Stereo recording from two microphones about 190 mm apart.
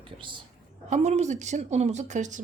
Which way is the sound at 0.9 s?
35° right (ahead or behind).